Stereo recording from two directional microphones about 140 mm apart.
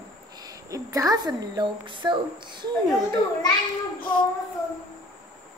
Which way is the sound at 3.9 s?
90° left.